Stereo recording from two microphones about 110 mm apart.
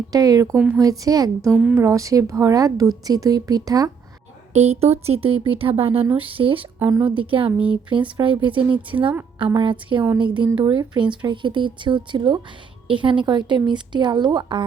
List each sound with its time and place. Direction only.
0.1 s speech: 35° right (ahead or behind)
0.5 s speech: 10° right (ahead or behind)
0.8 s speech: 35° right (ahead or behind)
1.5 s speech: 10° right (ahead or behind)
1.7 s speech: 25° right (ahead or behind)
4.5 s speech: 75° right (ahead or behind)
5.4 s speech: 55° right (ahead or behind)
7.5 s speech: 10° right (ahead or behind)
8.1 s speech: 50° right (ahead or behind)